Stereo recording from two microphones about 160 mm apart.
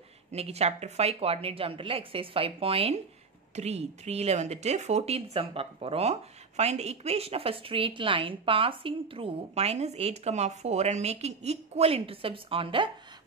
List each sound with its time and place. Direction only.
0.3 s a woman's voice: 40° right (ahead or behind)